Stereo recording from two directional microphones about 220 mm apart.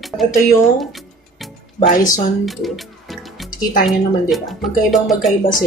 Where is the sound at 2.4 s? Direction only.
Centre (ahead or behind).